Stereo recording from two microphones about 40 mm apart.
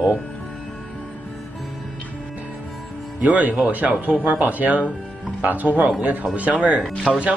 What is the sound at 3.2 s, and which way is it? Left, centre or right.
Speech, right.